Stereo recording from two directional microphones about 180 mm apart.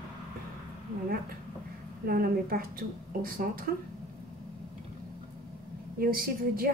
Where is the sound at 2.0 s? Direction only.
55° right (ahead or behind).